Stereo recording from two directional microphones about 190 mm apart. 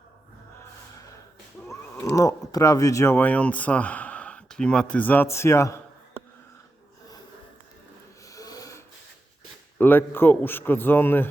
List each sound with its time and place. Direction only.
1.6 s speech: 15° left (ahead or behind)
8.3 s snort: 20° left (ahead or behind)
9.7 s a man's voice: 10° left (ahead or behind)